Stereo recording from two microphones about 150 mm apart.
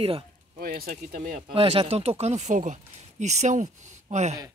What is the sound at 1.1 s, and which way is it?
Speech, 55° right (ahead or behind).